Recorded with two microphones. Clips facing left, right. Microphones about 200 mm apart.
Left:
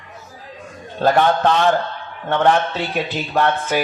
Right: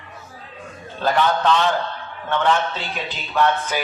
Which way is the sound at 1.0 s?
45° left (ahead or behind).